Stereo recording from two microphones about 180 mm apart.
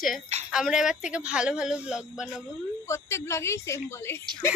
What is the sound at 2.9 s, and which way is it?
A woman's voice, 15° left (ahead or behind).